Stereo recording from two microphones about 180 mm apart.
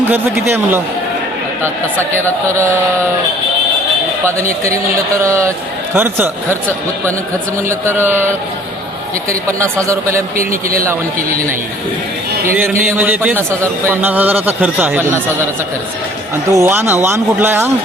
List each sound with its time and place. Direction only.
0.1 s a man's voice: 15° right (ahead or behind)
5.2 s a man's voice: 15° right (ahead or behind)
7.9 s a man's voice: 10° right (ahead or behind)
9.3 s a man's voice: 15° right (ahead or behind)
10.5 s a man's voice: 50° right (ahead or behind)
12.5 s a man's voice: 10° right (ahead or behind)
16.5 s a man's voice: 15° right (ahead or behind)